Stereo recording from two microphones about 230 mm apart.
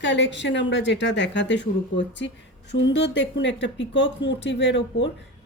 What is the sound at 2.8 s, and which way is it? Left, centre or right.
A woman's voice, left.